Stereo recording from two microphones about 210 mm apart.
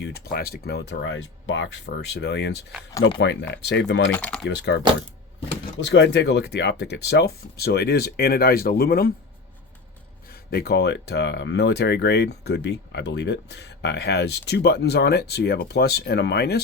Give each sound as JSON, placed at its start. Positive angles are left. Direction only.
{"t": 0.0, "sound": "speech", "side_deg": 50}
{"t": 4.1, "sound": "speech", "side_deg": 5}
{"t": 4.4, "sound": "speech", "side_deg": 55}
{"t": 5.8, "sound": "speech", "side_deg": 55}
{"t": 10.2, "sound": "speech", "side_deg": 45}